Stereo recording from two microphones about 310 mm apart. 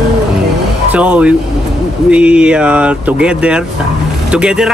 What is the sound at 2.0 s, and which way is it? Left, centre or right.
Speech, centre.